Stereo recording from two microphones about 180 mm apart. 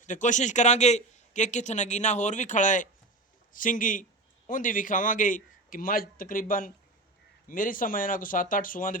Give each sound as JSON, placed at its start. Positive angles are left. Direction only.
{"t": 0.0, "sound": "a man's voice", "side_deg": 45}